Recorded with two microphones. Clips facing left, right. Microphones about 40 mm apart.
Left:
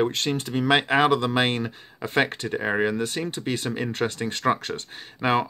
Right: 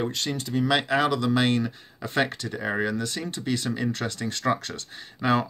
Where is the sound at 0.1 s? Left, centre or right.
Left.